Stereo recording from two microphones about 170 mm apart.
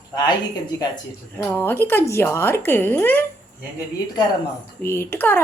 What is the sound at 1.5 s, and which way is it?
Speech, 10° left (ahead or behind).